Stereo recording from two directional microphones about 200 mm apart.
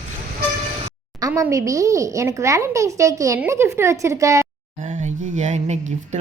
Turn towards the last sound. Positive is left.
turn(degrees=-35)  # may be behind; listen again after turning